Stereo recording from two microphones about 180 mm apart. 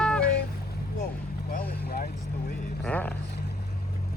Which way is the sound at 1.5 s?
55° left (ahead or behind).